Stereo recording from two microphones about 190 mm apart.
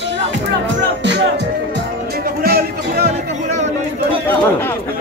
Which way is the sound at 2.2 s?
50° right (ahead or behind).